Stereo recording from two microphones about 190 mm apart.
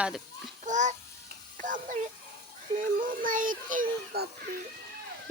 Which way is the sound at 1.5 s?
45° right (ahead or behind).